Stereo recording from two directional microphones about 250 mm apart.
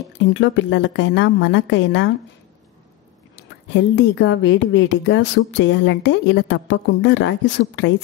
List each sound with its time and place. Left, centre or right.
0.2 s a woman's voice: left
3.3 s a woman's voice: left